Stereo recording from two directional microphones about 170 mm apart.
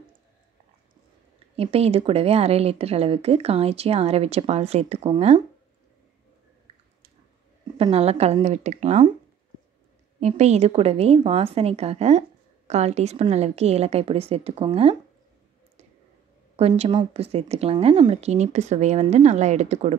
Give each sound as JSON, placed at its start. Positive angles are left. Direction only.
{"t": 1.6, "sound": "a woman's voice", "side_deg": -35}
{"t": 6.7, "sound": "a sound", "side_deg": -35}
{"t": 7.7, "sound": "a woman's voice", "side_deg": -35}
{"t": 10.2, "sound": "a woman's voice", "side_deg": -40}
{"t": 16.5, "sound": "a woman's voice", "side_deg": -35}